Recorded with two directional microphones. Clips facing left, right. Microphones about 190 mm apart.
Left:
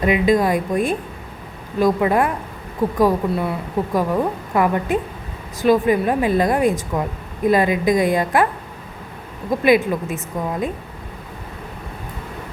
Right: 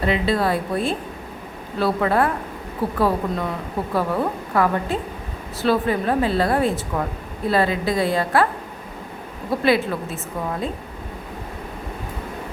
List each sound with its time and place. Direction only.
0.0 s speech: 15° left (ahead or behind)
9.5 s speech: 15° left (ahead or behind)